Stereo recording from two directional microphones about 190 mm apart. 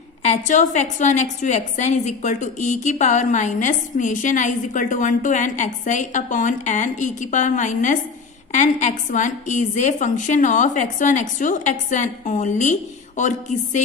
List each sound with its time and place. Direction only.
0.2 s a woman's voice: 40° left (ahead or behind)